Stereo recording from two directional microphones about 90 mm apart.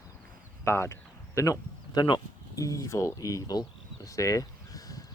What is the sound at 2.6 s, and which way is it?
Speech, 40° left (ahead or behind).